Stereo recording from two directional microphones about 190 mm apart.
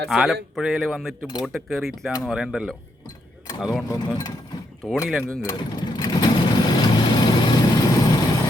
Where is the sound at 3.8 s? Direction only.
20° left (ahead or behind).